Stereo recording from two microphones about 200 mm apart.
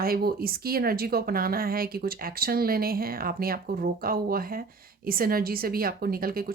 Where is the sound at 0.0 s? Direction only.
50° right (ahead or behind).